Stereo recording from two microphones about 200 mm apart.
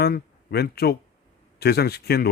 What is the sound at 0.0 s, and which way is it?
Speech, 55° left (ahead or behind).